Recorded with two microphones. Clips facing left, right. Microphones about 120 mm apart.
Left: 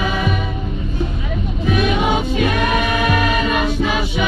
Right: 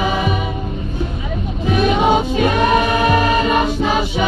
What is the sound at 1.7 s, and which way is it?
Music, 30° right (ahead or behind).